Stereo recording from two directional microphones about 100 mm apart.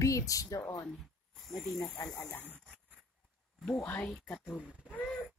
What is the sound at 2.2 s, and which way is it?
Speech, 20° left (ahead or behind).